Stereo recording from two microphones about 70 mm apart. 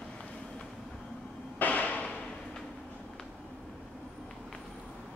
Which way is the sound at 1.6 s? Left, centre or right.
Left.